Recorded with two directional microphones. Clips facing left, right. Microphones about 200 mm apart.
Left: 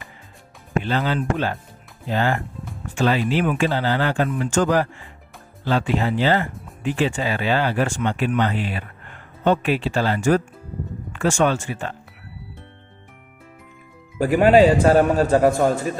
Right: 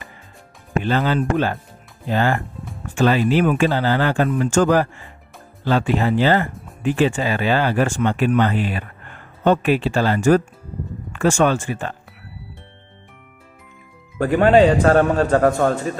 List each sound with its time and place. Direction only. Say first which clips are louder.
0.8 s speech: right 4 dB; 50° right (ahead or behind)
14.1 s a man's voice: even; 10° left (ahead or behind)